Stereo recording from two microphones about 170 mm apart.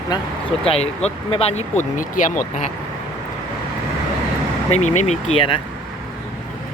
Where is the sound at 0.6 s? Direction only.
35° left (ahead or behind).